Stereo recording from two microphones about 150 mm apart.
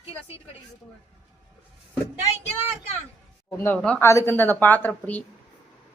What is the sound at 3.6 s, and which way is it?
Speech, 5° left (ahead or behind).